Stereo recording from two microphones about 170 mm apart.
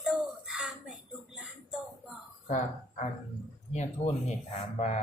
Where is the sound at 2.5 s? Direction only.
45° left (ahead or behind).